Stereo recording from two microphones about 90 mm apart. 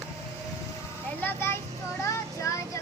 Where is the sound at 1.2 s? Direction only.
25° left (ahead or behind).